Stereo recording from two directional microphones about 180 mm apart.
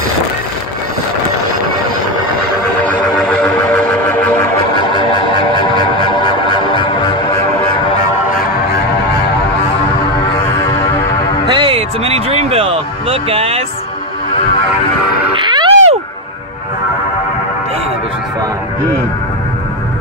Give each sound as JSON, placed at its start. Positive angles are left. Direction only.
{"t": 2.8, "sound": "a sound", "side_deg": 10}
{"t": 6.1, "sound": "music", "side_deg": 25}
{"t": 8.3, "sound": "music", "side_deg": 55}
{"t": 10.2, "sound": "music", "side_deg": 30}
{"t": 11.4, "sound": "music", "side_deg": -30}
{"t": 15.4, "sound": "a sound", "side_deg": -25}